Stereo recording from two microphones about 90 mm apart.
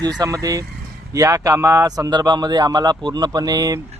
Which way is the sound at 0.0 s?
40° right (ahead or behind).